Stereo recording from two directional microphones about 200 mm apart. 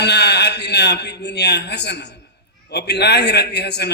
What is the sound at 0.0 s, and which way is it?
A man's voice, 55° left (ahead or behind).